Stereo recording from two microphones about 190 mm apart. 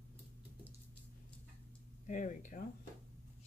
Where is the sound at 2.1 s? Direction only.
40° left (ahead or behind).